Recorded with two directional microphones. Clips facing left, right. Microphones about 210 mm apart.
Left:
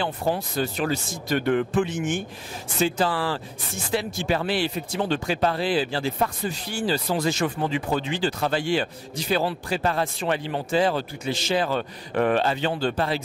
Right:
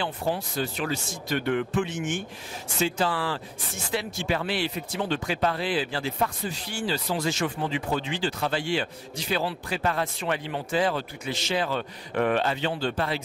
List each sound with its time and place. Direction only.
0.0 s speech: 45° left (ahead or behind)